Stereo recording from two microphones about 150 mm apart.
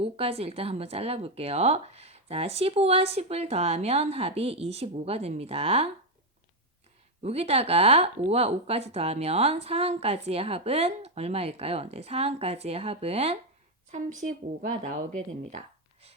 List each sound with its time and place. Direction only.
0.0 s speech: 40° right (ahead or behind)
7.2 s speech: 45° right (ahead or behind)
13.9 s a woman's voice: 55° right (ahead or behind)